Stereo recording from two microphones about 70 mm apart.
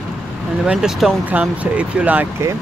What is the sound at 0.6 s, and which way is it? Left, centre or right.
Speech, centre.